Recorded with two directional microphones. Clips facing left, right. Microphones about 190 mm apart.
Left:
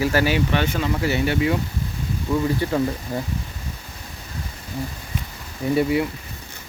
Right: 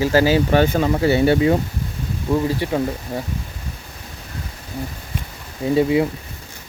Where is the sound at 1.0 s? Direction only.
30° right (ahead or behind).